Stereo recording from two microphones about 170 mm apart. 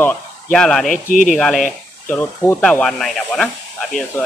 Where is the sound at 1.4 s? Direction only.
Centre (ahead or behind).